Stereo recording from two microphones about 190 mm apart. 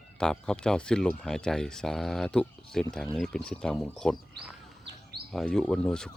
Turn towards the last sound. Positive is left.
turn(degrees=5)  # may be behind; listen again after turning